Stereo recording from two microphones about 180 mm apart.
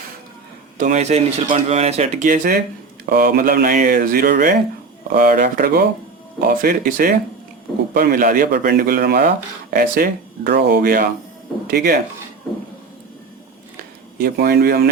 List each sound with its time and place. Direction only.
0.8 s speech: 40° right (ahead or behind); by 11.9 s 55° right (ahead or behind)
14.2 s speech: 55° right (ahead or behind)